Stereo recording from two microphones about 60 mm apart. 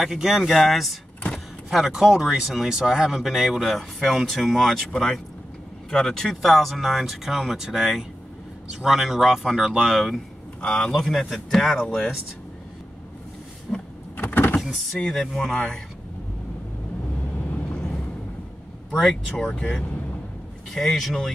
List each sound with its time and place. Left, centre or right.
0.0 s speech: centre
10.6 s speech: centre
10.9 s speech: centre
13.7 s power windows: centre
14.1 s vehicle: left
14.6 s speech: centre
18.9 s speech: centre
19.3 s speech: centre
20.7 s speech: centre